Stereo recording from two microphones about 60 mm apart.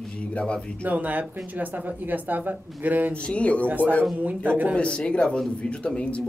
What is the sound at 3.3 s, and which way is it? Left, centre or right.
Speech, left.